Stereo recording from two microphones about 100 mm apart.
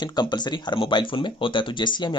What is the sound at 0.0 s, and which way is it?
Speech, 45° left (ahead or behind).